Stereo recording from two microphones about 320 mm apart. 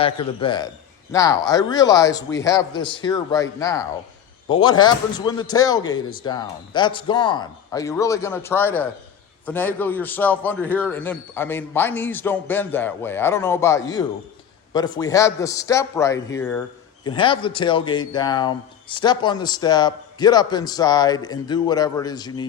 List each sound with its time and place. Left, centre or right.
0.0 s a man's voice: centre